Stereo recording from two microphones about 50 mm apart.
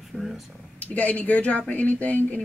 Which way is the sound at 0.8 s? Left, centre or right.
Left.